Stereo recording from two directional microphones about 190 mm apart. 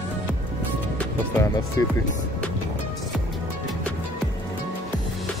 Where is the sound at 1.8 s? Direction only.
15° left (ahead or behind).